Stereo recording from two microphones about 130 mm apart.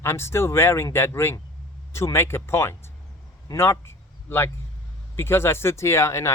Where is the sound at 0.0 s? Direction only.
20° left (ahead or behind).